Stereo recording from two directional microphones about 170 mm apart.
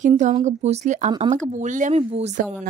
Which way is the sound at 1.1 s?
25° right (ahead or behind).